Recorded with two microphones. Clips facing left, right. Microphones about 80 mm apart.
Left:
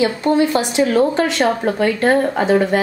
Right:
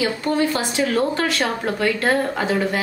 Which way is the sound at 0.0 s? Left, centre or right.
Left.